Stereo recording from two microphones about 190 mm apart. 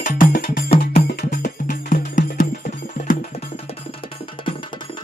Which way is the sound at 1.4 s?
45° left (ahead or behind).